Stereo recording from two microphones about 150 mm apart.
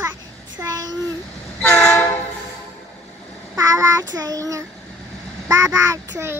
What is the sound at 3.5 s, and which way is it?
Child singing, 25° right (ahead or behind).